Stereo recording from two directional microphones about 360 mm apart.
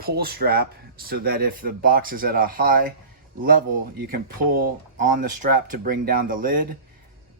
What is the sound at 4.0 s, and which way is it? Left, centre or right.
Speech, right.